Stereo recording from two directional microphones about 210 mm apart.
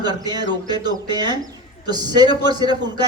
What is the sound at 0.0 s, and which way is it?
A man's voice, 20° right (ahead or behind).